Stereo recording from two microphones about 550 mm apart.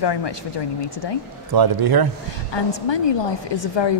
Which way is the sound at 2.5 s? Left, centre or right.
Left.